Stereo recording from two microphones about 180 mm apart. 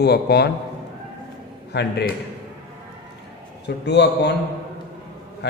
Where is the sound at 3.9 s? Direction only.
70° left (ahead or behind).